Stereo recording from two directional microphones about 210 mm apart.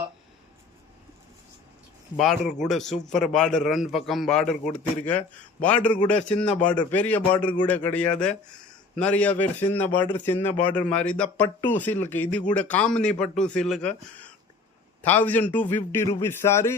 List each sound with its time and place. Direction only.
2.1 s a man's voice: centre (ahead or behind)